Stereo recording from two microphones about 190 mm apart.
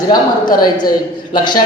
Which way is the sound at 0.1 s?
20° left (ahead or behind).